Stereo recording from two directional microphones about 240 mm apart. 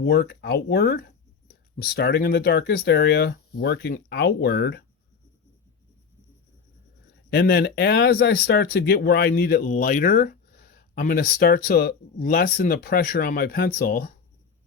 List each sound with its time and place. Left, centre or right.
0.0 s speech: left
7.3 s speech: left